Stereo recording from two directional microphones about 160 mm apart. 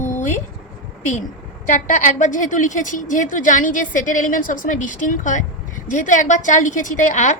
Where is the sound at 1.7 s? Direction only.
50° left (ahead or behind).